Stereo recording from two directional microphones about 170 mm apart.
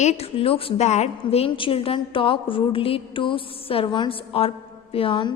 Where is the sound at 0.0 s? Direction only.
40° left (ahead or behind).